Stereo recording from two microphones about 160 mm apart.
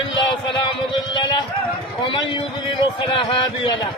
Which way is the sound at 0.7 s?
30° left (ahead or behind).